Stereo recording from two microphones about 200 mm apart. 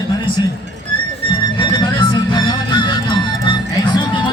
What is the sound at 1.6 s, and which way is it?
Music, 20° left (ahead or behind).